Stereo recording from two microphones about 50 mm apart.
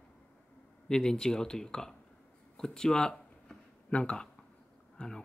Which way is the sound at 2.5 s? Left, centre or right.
Centre.